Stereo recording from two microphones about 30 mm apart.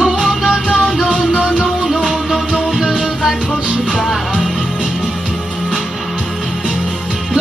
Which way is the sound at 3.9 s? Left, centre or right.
Left.